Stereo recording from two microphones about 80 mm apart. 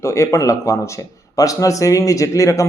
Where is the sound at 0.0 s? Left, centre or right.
Left.